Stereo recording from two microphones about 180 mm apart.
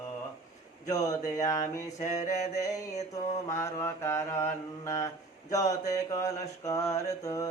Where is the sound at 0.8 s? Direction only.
20° left (ahead or behind).